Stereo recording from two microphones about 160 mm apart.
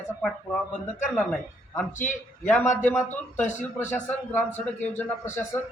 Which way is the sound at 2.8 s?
10° left (ahead or behind).